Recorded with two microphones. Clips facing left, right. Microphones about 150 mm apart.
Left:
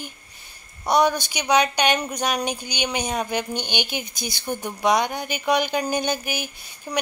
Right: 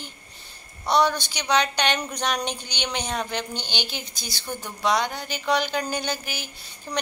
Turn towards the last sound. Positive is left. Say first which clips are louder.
# left 2 dB
turn(degrees=15)  # may be behind; listen again after turning